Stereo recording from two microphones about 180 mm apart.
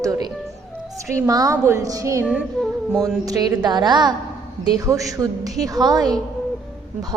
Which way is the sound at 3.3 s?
20° right (ahead or behind).